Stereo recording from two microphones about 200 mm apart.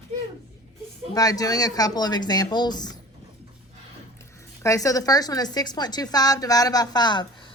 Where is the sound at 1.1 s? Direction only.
20° left (ahead or behind).